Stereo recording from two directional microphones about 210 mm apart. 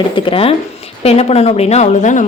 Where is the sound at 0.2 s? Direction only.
25° left (ahead or behind).